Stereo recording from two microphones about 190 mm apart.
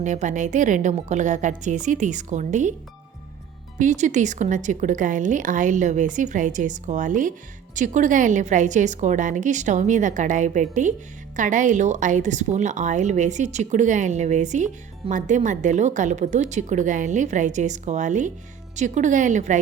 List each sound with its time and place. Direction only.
0.0 s a woman's voice: 40° right (ahead or behind)
3.8 s a woman's voice: 40° right (ahead or behind)